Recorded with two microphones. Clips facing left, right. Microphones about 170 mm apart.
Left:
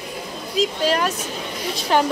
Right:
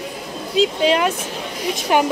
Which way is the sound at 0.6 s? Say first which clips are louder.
Right 4 dB; 20° right (ahead or behind).